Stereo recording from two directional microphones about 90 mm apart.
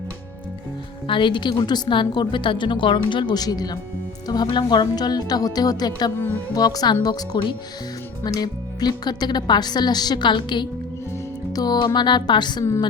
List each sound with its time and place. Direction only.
1.0 s a woman's voice: 65° left (ahead or behind)
11.5 s a woman's voice: 45° left (ahead or behind)